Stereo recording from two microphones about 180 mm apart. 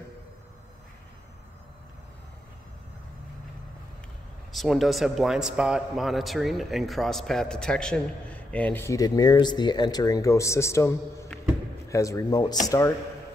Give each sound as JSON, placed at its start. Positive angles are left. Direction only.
{"t": 4.5, "sound": "a man's voice", "side_deg": 0}